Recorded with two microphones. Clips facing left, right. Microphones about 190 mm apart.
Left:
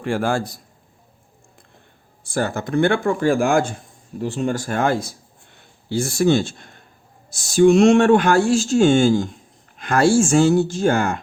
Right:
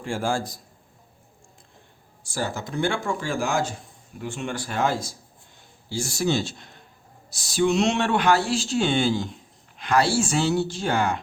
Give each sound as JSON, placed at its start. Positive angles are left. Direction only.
{"t": 0.0, "sound": "speech", "side_deg": 65}
{"t": 2.2, "sound": "speech", "side_deg": 55}
{"t": 4.2, "sound": "speech", "side_deg": 35}